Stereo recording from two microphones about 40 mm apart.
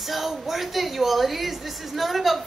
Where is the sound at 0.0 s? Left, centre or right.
Centre.